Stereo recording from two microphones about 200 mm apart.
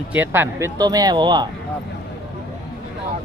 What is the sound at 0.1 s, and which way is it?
Speech, 10° right (ahead or behind).